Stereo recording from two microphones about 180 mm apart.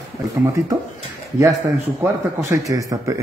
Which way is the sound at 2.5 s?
20° right (ahead or behind).